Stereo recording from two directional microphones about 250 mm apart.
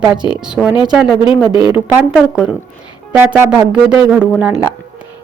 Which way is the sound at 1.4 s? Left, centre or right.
Centre.